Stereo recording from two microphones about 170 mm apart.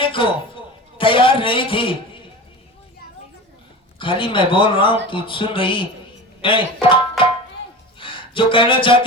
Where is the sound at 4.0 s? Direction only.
30° left (ahead or behind).